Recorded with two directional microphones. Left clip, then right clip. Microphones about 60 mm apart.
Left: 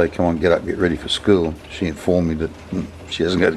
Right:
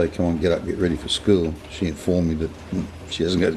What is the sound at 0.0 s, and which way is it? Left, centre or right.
Speech, left.